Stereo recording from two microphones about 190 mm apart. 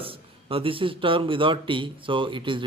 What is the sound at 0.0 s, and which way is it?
Speech, 30° right (ahead or behind).